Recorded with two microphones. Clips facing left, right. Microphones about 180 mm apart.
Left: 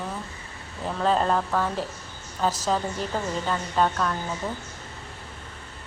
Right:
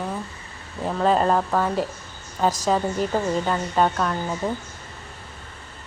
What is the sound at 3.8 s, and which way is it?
Speech, 10° right (ahead or behind).